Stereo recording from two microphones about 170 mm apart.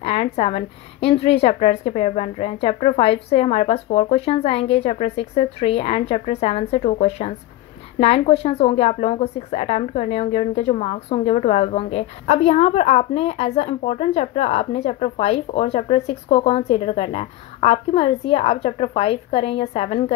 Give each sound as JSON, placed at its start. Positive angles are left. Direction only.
{"t": 0.0, "sound": "speech", "side_deg": 40}